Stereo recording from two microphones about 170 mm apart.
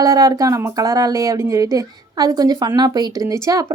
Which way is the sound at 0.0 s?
20° right (ahead or behind).